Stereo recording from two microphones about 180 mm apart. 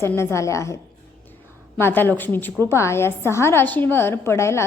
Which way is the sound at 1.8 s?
10° left (ahead or behind).